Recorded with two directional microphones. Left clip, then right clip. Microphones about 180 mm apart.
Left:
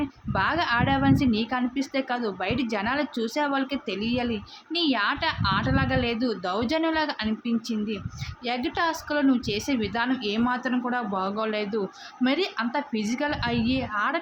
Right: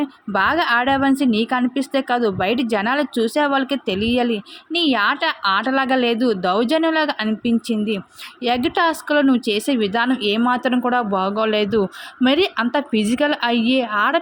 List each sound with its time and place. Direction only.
0.0 s a woman's voice: 35° right (ahead or behind)